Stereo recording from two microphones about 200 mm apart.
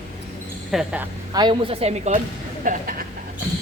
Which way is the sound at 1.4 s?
25° right (ahead or behind).